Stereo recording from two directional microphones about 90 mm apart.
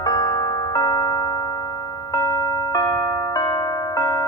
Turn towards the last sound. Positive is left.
turn(degrees=40)  # may be behind; listen again after turning